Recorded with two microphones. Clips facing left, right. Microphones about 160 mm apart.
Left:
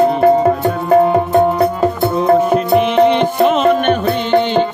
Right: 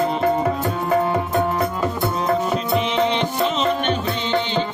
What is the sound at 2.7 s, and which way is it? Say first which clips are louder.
Music: left 9 dB; 55° left (ahead or behind).